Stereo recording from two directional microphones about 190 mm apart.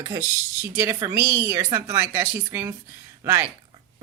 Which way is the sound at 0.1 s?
15° right (ahead or behind).